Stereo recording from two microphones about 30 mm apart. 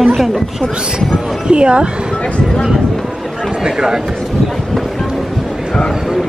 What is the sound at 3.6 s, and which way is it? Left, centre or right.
Speech, right.